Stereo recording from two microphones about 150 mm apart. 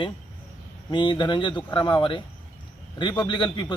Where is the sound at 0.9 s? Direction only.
30° left (ahead or behind).